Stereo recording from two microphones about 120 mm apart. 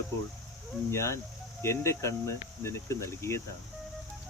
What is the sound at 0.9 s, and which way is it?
Speech, 25° left (ahead or behind).